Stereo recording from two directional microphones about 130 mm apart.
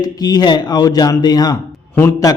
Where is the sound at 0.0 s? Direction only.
30° left (ahead or behind).